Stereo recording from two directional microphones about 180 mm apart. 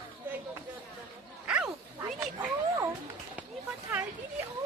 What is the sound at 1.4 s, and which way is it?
Wild animals, 5° right (ahead or behind).